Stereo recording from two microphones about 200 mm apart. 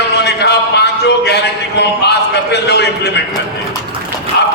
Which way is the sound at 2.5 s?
55° left (ahead or behind).